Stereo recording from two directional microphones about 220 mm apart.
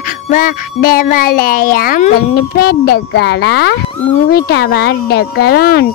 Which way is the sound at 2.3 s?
45° left (ahead or behind).